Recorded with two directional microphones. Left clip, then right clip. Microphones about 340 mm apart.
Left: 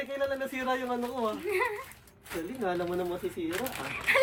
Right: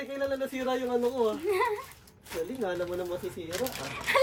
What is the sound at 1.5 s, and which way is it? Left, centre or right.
Speech, right.